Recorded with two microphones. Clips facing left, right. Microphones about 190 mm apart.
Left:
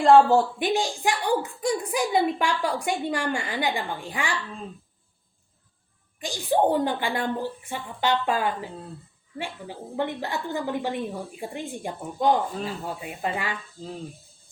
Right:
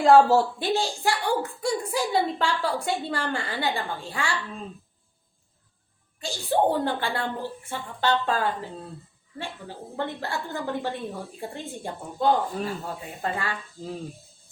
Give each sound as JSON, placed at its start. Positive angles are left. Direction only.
{"t": 0.0, "sound": "speech", "side_deg": -5}
{"t": 0.6, "sound": "a woman's voice", "side_deg": 15}
{"t": 6.1, "sound": "a woman's voice", "side_deg": 15}